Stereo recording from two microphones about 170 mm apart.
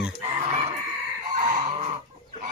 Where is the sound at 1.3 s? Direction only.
45° right (ahead or behind).